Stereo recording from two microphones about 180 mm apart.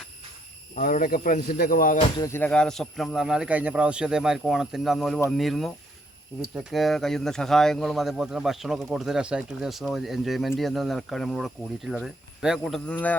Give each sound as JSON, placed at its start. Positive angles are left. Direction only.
{"t": 0.8, "sound": "speech", "side_deg": 50}
{"t": 2.1, "sound": "speech", "side_deg": 15}